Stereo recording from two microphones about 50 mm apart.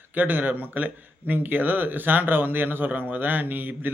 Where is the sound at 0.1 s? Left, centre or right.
Right.